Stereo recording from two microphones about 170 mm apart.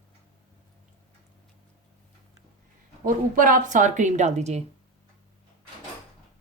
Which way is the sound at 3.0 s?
55° right (ahead or behind).